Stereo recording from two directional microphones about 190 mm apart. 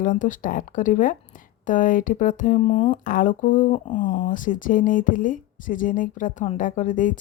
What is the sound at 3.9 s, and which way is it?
Speech, 25° left (ahead or behind).